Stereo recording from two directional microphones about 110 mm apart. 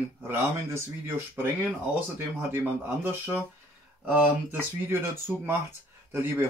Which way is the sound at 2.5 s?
20° right (ahead or behind).